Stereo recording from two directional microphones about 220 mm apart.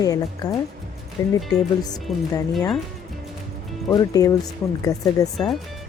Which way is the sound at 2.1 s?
Centre (ahead or behind).